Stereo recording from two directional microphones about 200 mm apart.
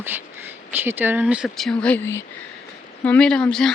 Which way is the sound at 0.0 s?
10° right (ahead or behind).